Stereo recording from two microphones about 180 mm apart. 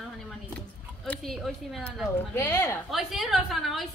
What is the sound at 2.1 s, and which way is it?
Speech, 10° left (ahead or behind).